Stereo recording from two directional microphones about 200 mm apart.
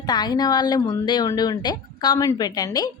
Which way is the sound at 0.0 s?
20° left (ahead or behind).